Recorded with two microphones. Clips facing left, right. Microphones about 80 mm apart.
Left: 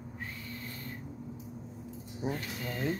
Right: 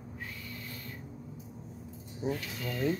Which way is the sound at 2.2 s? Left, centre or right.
Centre.